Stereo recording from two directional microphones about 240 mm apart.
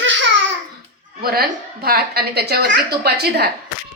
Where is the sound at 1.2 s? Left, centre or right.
Right.